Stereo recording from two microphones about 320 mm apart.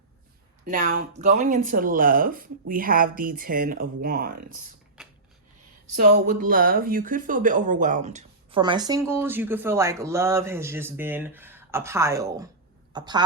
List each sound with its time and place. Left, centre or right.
0.6 s speech: right
6.0 s a woman's voice: right